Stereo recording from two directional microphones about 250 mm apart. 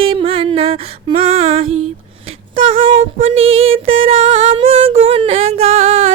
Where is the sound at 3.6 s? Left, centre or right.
Right.